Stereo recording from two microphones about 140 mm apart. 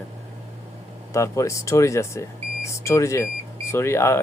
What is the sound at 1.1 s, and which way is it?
Speech, 20° left (ahead or behind).